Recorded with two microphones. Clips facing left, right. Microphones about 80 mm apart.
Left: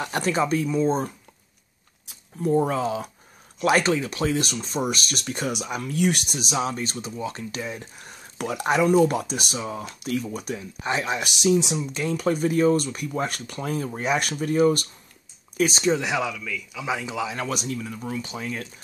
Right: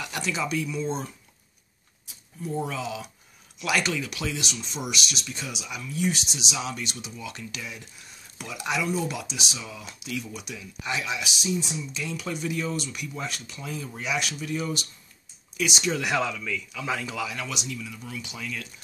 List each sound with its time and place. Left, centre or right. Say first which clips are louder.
0.0 s speech: left 6 dB; left
7.9 s speech: left 6 dB; left
12.0 s speech: left 9 dB; left
16.1 s speech: left 1 dB; centre
16.3 s a man's voice: even; centre
16.7 s speech: left 4 dB; centre
17.4 s speech: left 6 dB; left